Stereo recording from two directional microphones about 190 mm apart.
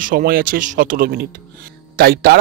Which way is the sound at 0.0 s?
50° right (ahead or behind).